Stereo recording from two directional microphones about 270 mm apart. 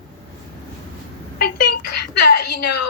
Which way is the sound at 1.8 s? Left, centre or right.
Left.